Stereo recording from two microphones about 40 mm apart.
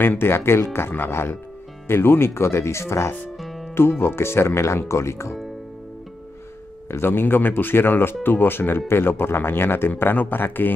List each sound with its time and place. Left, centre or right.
0.0 s speech: left
0.7 s speech: left
1.9 s speech: left
3.3 s music: centre
4.0 s speech: left
6.9 s speech: left